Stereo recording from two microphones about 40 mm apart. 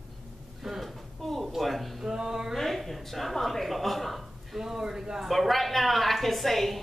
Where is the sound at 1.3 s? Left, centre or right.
Centre.